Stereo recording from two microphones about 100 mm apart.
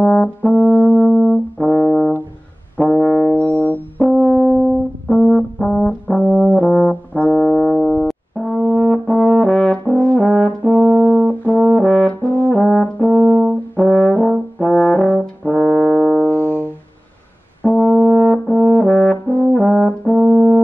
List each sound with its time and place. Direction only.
0.0 s brass instrument: 10° left (ahead or behind)
2.8 s music: 5° left (ahead or behind)
3.3 s music: 15° left (ahead or behind)
4.0 s brass instrument: 5° right (ahead or behind)
5.0 s brass instrument: 5° left (ahead or behind)
8.1 s brass instrument: centre (ahead or behind)
10.6 s brass instrument: 15° right (ahead or behind)
11.7 s brass instrument: 5° left (ahead or behind)
13.1 s french horn: 15° right (ahead or behind)
13.8 s brass instrument: centre (ahead or behind); by 16.4 s 20° left (ahead or behind)
16.4 s music: 20° right (ahead or behind)
17.8 s brass instrument: 5° right (ahead or behind)
20.1 s brass instrument: 15° right (ahead or behind)